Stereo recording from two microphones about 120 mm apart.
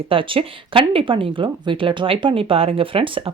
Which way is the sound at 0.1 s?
45° right (ahead or behind).